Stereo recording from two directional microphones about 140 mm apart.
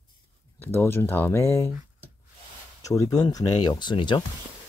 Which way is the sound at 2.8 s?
25° left (ahead or behind).